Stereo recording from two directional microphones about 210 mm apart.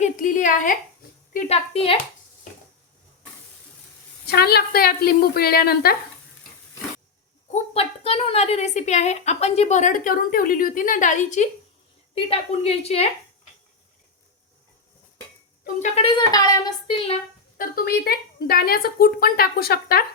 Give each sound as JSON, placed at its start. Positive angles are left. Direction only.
{"t": 0.0, "sound": "a woman's voice", "side_deg": 40}
{"t": 4.3, "sound": "a woman's voice", "side_deg": 50}
{"t": 7.5, "sound": "a woman's voice", "side_deg": 30}
{"t": 15.6, "sound": "speech", "side_deg": 30}
{"t": 17.6, "sound": "a woman's voice", "side_deg": 45}